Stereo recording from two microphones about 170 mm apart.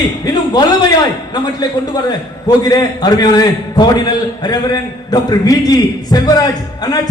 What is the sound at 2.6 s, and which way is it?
A man's voice, 25° left (ahead or behind).